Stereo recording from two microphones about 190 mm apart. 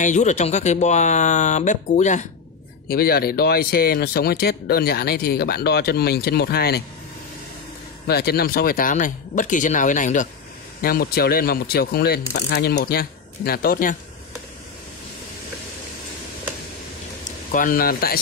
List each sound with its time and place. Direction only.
0.0 s speech: 40° left (ahead or behind)
2.9 s speech: 55° left (ahead or behind)
8.1 s speech: 55° left (ahead or behind)
10.8 s speech: 50° left (ahead or behind)
17.5 s speech: 45° left (ahead or behind)